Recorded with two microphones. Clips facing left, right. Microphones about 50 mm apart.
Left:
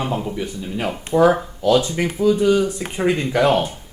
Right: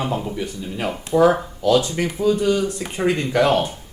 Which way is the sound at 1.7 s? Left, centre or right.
Left.